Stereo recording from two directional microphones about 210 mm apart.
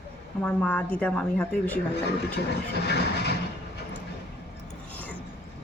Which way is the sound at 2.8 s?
55° left (ahead or behind).